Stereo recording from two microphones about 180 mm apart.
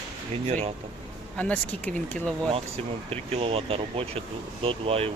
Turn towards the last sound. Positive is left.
turn(degrees=-30)  # may be behind; listen again after turning